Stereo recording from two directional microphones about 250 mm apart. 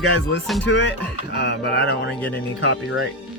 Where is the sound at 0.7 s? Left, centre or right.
Left.